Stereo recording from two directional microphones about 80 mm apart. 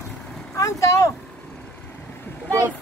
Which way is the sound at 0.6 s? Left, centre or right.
Left.